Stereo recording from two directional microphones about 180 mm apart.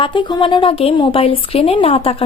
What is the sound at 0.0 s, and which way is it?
Speech, 25° left (ahead or behind).